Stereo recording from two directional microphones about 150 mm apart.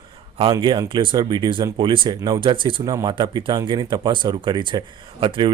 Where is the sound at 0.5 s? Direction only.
25° right (ahead or behind).